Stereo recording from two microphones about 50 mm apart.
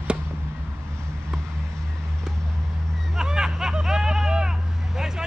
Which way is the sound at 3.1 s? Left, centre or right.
Centre.